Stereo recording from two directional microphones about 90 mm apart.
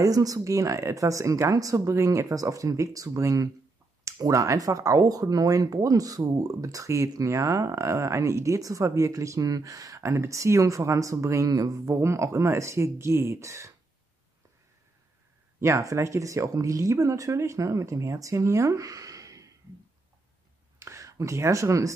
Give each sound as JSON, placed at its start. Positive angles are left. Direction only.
{"t": 0.0, "sound": "speech", "side_deg": -40}
{"t": 15.6, "sound": "speech", "side_deg": -35}
{"t": 20.8, "sound": "speech", "side_deg": -35}